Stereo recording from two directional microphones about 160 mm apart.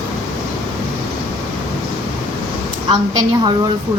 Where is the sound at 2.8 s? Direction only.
25° right (ahead or behind).